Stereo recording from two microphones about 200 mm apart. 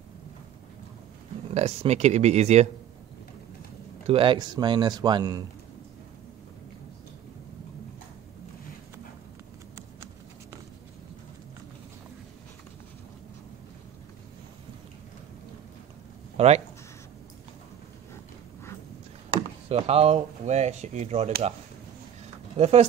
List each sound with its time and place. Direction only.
1.5 s speech: 35° right (ahead or behind)
4.1 s a man's voice: 25° right (ahead or behind)
16.3 s a sound: 35° right (ahead or behind)
19.7 s speech: 30° right (ahead or behind)
22.6 s speech: 35° right (ahead or behind)